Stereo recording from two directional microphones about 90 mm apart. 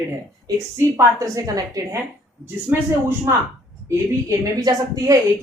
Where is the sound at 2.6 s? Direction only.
25° right (ahead or behind).